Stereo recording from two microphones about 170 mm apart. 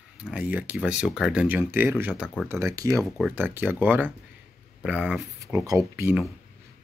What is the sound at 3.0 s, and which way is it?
Speech, 5° right (ahead or behind).